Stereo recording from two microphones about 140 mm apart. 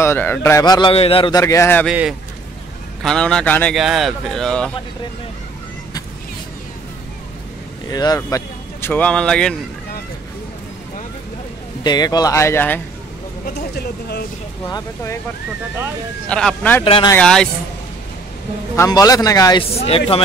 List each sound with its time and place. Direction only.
0.0 s speech: 15° left (ahead or behind)
0.9 s speech: 45° left (ahead or behind)
1.3 s speech: 20° left (ahead or behind)
3.0 s speech: 5° left (ahead or behind)
3.7 s speech: centre (ahead or behind)
7.9 s speech: 30° left (ahead or behind); by 9.6 s 5° left (ahead or behind)
11.8 s speech: 30° left (ahead or behind)
16.3 s speech: 5° left (ahead or behind)
16.8 s speech: 40° left (ahead or behind)
17.2 s speech: 5° left (ahead or behind)
18.8 s speech: 25° left (ahead or behind)
19.8 s speech: 45° left (ahead or behind)